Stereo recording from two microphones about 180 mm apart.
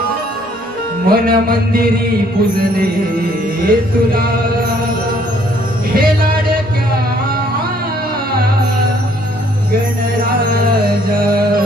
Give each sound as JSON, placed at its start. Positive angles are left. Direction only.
{"t": 1.0, "sound": "mantra", "side_deg": -55}
{"t": 3.7, "sound": "mantra", "side_deg": -55}
{"t": 5.9, "sound": "music", "side_deg": -55}
{"t": 11.1, "sound": "music", "side_deg": -55}